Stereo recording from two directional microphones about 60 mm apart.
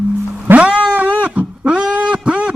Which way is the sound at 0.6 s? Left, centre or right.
Centre.